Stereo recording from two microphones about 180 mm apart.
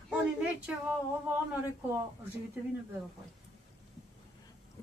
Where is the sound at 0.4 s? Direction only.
5° right (ahead or behind).